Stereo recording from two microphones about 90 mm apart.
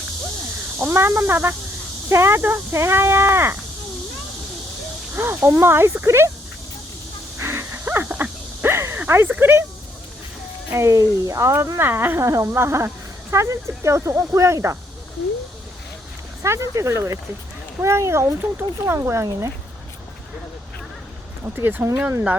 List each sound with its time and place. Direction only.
0.8 s speech: 25° right (ahead or behind)
5.1 s speech: 30° right (ahead or behind)
7.3 s a sound: 30° right (ahead or behind)
8.0 s a sound: 20° right (ahead or behind)
10.7 s speech: 30° right (ahead or behind)
16.4 s speech: 35° right (ahead or behind)
21.4 s speech: 25° right (ahead or behind)